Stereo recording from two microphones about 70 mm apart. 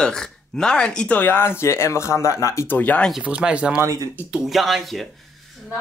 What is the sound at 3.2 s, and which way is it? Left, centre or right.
Speech, centre.